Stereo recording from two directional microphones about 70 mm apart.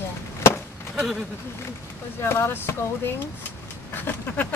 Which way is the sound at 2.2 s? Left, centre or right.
Left.